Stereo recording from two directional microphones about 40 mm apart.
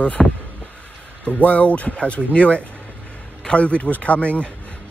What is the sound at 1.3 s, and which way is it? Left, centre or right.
Speech, left.